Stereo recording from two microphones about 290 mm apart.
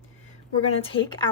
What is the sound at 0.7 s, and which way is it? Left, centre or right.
Speech, centre.